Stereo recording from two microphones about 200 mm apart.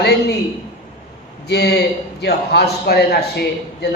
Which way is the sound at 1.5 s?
55° left (ahead or behind).